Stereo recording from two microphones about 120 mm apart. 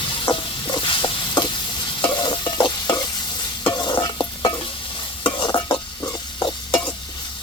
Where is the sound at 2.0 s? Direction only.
40° left (ahead or behind).